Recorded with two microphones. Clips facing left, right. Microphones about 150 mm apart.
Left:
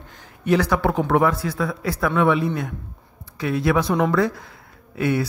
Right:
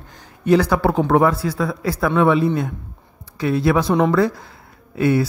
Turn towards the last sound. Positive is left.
turn(degrees=-35)  # may be behind; listen again after turning